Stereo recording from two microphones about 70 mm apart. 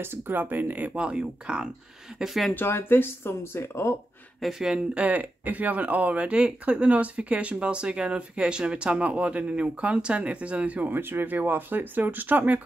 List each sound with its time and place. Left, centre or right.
0.0 s speech: right; by 1.7 s centre
2.1 s speech: centre
2.5 s speech: left
4.4 s speech: centre; by 12.5 s right